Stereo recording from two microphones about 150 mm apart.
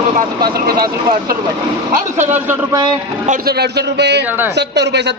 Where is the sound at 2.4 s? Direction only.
15° right (ahead or behind).